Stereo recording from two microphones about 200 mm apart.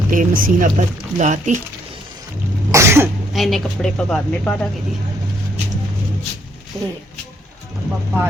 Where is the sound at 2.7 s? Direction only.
15° right (ahead or behind).